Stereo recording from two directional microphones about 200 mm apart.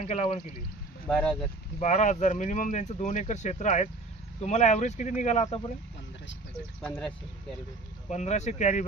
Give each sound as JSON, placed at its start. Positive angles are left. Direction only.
{"t": 0.0, "sound": "speech", "side_deg": 30}
{"t": 1.0, "sound": "speech", "side_deg": 5}
{"t": 1.8, "sound": "speech", "side_deg": 35}
{"t": 6.8, "sound": "speech", "side_deg": 5}
{"t": 8.1, "sound": "speech", "side_deg": 35}